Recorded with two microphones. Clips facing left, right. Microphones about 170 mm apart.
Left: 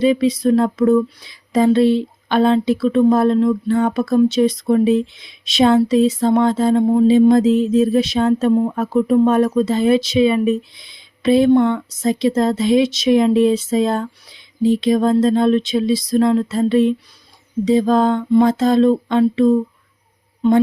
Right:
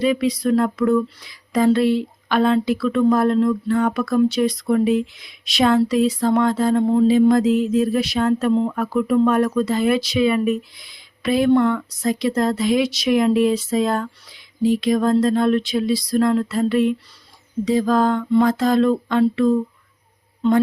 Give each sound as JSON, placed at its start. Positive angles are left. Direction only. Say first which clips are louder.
{"t": 0.0, "sound": "speech", "louder": "left 4 dB", "side_deg": 25}
{"t": 6.8, "sound": "a sound", "louder": "left 2 dB", "side_deg": 15}
{"t": 7.1, "sound": "speech", "louder": "left 4 dB", "side_deg": 25}